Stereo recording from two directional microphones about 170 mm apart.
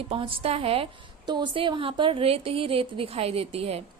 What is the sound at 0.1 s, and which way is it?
A woman's voice, 30° right (ahead or behind).